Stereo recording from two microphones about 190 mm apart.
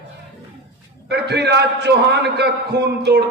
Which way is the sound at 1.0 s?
60° right (ahead or behind).